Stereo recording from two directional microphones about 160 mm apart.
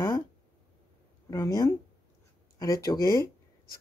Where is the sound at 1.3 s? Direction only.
25° left (ahead or behind).